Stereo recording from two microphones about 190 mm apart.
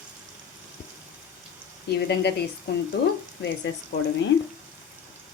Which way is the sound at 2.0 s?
60° left (ahead or behind).